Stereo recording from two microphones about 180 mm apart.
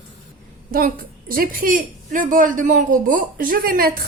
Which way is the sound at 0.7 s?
50° right (ahead or behind).